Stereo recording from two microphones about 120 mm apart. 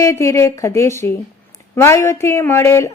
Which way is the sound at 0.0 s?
25° left (ahead or behind).